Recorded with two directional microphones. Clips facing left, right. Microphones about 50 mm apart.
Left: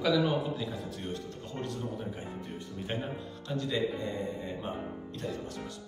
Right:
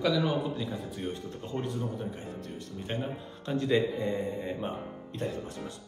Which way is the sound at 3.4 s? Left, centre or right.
Right.